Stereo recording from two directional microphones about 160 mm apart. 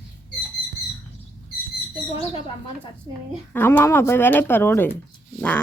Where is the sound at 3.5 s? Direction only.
10° left (ahead or behind).